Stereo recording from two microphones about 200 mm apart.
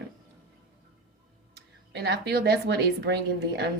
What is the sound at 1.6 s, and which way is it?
Speech, 55° right (ahead or behind).